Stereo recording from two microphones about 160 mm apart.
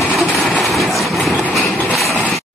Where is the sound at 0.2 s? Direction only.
Centre (ahead or behind).